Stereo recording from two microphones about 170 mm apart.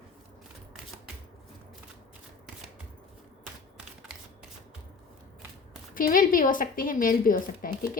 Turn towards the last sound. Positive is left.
turn(degrees=55)  # may be behind; listen again after turning